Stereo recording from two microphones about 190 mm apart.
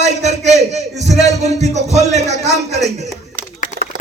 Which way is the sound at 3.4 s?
45° right (ahead or behind).